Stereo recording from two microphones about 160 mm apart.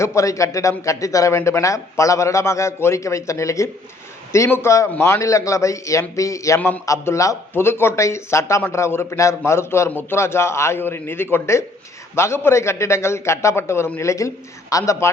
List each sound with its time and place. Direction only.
0.0 s speech: 20° left (ahead or behind)
6.6 s speech: 10° left (ahead or behind)